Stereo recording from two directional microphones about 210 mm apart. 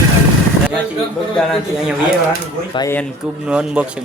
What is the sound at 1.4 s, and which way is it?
Speech, centre (ahead or behind).